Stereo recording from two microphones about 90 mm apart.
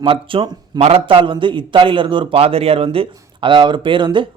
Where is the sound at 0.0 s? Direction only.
75° right (ahead or behind).